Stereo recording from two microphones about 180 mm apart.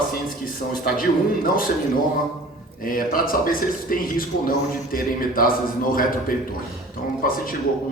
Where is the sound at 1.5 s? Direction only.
50° left (ahead or behind).